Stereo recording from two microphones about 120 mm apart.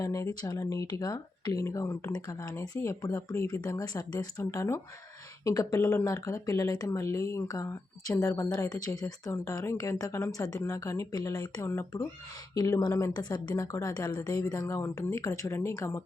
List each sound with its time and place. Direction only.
0.0 s speech: 30° left (ahead or behind)